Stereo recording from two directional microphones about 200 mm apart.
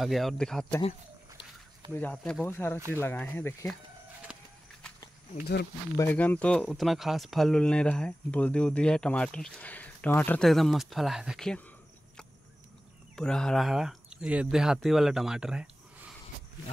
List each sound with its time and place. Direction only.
0.0 s speech: centre (ahead or behind)
2.0 s speech: 10° left (ahead or behind)
4.3 s walk: 5° right (ahead or behind)
5.4 s speech: 55° left (ahead or behind)
5.9 s speech: 10° left (ahead or behind)
13.1 s speech: 5° left (ahead or behind)